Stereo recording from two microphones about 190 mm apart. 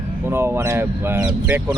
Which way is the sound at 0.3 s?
10° right (ahead or behind).